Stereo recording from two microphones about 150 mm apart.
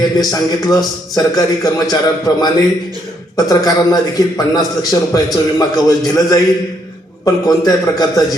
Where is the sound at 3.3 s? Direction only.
25° left (ahead or behind).